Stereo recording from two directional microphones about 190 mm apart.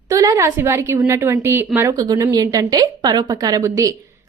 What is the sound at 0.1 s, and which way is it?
A woman's voice, 15° right (ahead or behind).